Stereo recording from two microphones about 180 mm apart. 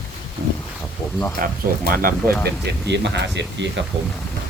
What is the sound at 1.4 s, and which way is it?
Speech, 50° right (ahead or behind).